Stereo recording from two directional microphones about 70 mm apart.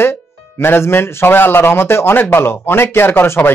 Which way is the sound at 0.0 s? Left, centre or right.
Left.